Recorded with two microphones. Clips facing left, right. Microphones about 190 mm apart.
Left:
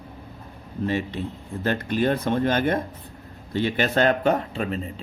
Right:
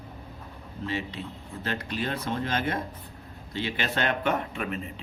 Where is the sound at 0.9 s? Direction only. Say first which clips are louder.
Left 6 dB; 50° left (ahead or behind).